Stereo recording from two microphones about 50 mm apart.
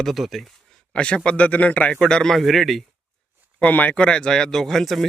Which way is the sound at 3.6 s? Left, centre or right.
Left.